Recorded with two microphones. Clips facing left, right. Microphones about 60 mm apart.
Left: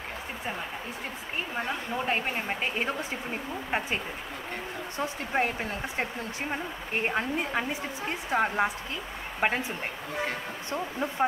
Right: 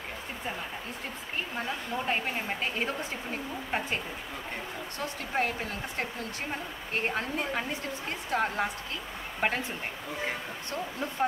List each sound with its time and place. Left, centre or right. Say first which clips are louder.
2.0 s a woman's voice: left 1 dB; centre
10.7 s a woman's voice: left 3 dB; centre